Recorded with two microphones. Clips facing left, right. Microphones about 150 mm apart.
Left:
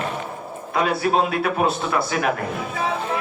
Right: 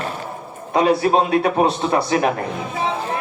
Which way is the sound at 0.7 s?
35° right (ahead or behind).